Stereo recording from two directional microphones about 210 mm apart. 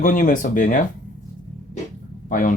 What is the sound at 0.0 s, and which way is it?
Speech, 40° left (ahead or behind).